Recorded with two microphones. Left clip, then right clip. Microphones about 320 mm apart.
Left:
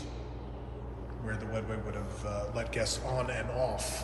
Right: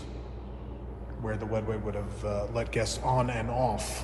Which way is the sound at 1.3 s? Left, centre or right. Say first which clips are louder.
Right 5 dB; centre.